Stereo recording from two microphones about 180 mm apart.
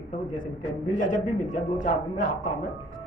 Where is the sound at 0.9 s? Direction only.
45° left (ahead or behind).